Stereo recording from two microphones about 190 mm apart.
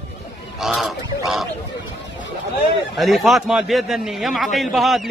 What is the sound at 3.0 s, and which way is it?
A man's voice, centre (ahead or behind).